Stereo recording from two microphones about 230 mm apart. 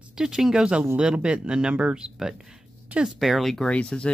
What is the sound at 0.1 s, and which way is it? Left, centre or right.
Speech, centre.